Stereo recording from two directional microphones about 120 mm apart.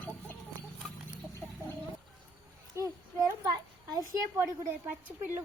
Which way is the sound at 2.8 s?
25° right (ahead or behind).